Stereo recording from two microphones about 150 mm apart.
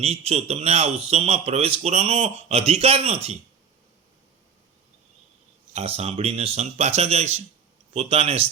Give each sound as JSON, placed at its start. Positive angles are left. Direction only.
{"t": 0.0, "sound": "speech", "side_deg": -45}
{"t": 5.7, "sound": "speech", "side_deg": -45}